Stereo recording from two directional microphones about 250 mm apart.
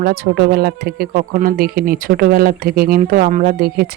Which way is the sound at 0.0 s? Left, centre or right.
Right.